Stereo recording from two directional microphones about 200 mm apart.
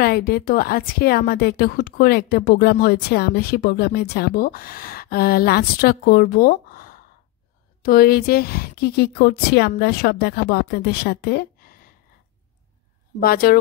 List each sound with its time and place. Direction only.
0.0 s a woman's voice: 50° left (ahead or behind)
13.2 s a woman's voice: 50° left (ahead or behind)